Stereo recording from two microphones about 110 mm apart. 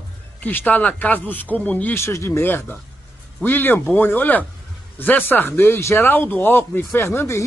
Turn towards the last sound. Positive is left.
turn(degrees=20)  # may be behind; listen again after turning